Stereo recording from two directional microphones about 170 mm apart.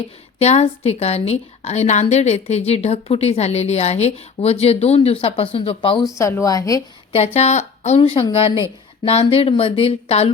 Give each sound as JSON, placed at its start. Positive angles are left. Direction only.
{"t": 0.3, "sound": "a woman's voice", "side_deg": 40}
{"t": 6.1, "sound": "speech", "side_deg": 15}
{"t": 7.3, "sound": "a woman's voice", "side_deg": 40}